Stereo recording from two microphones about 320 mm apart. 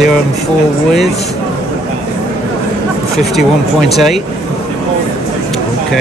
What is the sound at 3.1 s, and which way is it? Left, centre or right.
Speech, centre.